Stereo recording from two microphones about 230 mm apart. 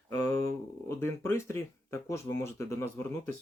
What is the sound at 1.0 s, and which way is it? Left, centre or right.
Speech, centre.